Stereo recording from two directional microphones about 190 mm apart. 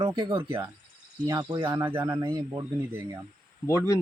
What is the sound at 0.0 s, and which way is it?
Speech, 20° right (ahead or behind).